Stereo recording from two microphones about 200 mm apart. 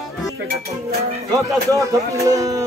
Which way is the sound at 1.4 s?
15° right (ahead or behind).